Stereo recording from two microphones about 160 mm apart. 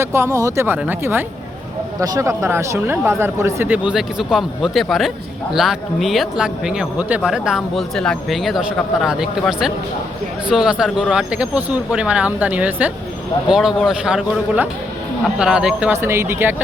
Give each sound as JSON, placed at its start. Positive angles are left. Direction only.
{"t": 0.0, "sound": "speech", "side_deg": -15}
{"t": 16.0, "sound": "speech", "side_deg": -15}